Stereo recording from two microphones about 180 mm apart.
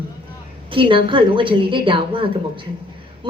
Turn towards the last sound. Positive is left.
turn(degrees=-30)  # may be behind; listen again after turning